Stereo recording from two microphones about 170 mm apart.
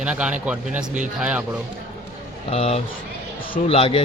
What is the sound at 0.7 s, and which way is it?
Speech, 45° right (ahead or behind).